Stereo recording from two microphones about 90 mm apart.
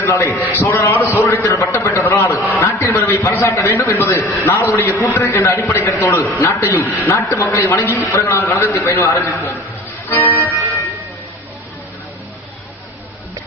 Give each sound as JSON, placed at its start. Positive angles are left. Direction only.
{"t": 0.0, "sound": "a man's voice", "side_deg": 30}
{"t": 1.6, "sound": "a sound", "side_deg": 25}
{"t": 3.3, "sound": "a man's voice", "side_deg": 25}
{"t": 10.1, "sound": "music", "side_deg": 25}